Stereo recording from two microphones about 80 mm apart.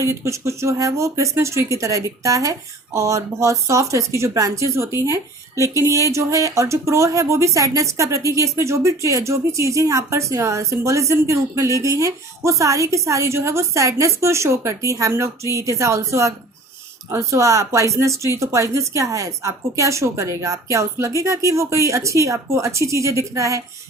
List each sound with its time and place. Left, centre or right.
0.0 s speech: right